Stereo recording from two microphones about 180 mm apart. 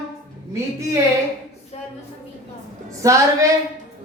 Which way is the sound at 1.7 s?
35° left (ahead or behind).